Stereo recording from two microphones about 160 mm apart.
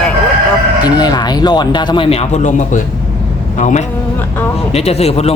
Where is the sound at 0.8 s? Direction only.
25° left (ahead or behind).